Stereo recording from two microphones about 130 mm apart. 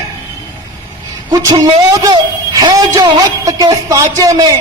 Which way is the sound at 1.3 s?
30° right (ahead or behind).